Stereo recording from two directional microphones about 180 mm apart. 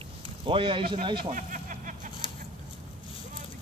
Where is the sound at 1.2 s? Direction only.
45° right (ahead or behind).